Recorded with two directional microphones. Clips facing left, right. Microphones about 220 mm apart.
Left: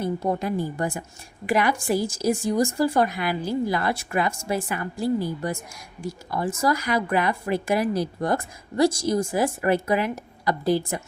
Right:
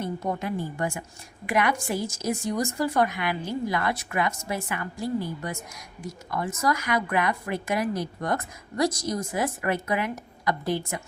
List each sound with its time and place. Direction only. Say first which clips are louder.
0.0 s speech: left 4 dB; 30° left (ahead or behind)